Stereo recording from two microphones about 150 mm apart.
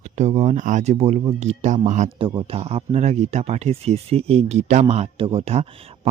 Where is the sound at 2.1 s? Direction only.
35° right (ahead or behind).